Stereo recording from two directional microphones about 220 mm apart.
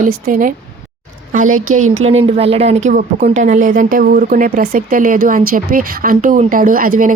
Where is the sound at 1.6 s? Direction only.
75° right (ahead or behind).